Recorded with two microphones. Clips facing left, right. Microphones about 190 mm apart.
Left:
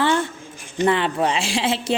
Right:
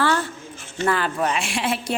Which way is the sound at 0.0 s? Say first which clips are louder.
Left 2 dB; 25° left (ahead or behind).